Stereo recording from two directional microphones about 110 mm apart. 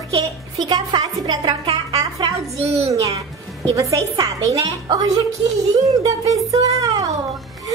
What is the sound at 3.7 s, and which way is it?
A woman's voice, 30° right (ahead or behind).